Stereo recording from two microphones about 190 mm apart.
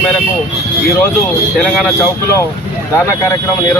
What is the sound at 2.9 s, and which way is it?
Speech, 15° left (ahead or behind).